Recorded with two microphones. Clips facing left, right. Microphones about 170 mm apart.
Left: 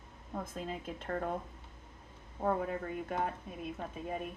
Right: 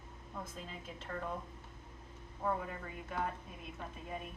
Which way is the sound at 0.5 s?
50° left (ahead or behind).